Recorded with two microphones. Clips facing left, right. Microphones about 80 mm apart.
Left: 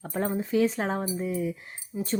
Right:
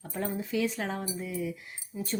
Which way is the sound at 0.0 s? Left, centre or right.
Left.